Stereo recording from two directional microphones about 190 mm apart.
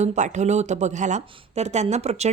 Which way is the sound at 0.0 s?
40° right (ahead or behind).